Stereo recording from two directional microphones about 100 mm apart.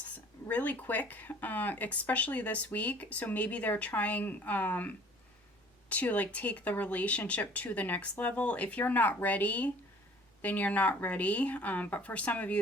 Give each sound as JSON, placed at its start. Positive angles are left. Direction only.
{"t": 0.4, "sound": "speech", "side_deg": 15}